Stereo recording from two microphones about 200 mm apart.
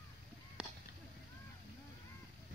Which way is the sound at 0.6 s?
5° right (ahead or behind).